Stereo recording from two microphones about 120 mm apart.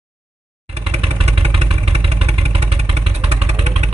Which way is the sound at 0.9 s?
55° right (ahead or behind).